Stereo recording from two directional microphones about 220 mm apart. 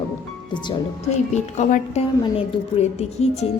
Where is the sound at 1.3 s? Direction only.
30° left (ahead or behind).